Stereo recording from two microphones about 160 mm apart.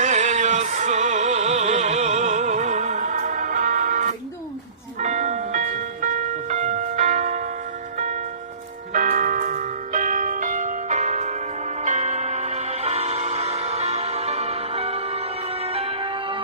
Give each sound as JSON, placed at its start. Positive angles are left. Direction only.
{"t": 0.0, "sound": "music", "side_deg": -50}
{"t": 7.9, "sound": "tubular bells", "side_deg": -50}
{"t": 8.9, "sound": "church bell", "side_deg": -55}
{"t": 11.8, "sound": "music", "side_deg": -45}